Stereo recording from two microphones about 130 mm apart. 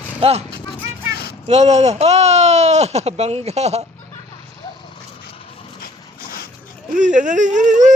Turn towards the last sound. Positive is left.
turn(degrees=-70)  # may be behind; listen again after turning